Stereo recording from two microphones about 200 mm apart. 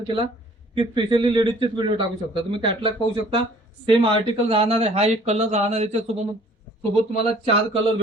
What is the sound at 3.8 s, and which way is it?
Speech, 25° right (ahead or behind).